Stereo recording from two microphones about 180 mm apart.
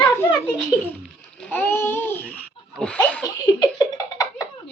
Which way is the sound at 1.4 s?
10° left (ahead or behind).